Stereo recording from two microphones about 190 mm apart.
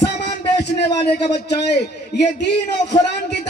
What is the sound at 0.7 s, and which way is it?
Speech, 65° left (ahead or behind).